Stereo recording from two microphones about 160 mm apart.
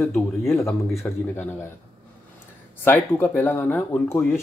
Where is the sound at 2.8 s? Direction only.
15° left (ahead or behind).